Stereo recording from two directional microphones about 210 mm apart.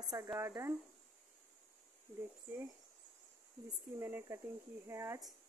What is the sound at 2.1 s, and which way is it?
Speech, 10° left (ahead or behind).